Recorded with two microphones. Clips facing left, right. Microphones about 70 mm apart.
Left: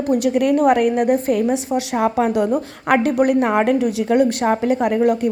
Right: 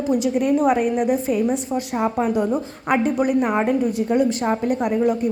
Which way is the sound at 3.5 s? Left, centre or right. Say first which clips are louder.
Left 3 dB; left.